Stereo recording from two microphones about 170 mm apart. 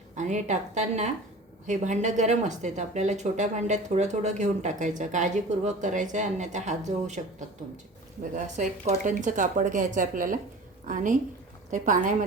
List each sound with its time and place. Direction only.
0.2 s speech: 45° right (ahead or behind)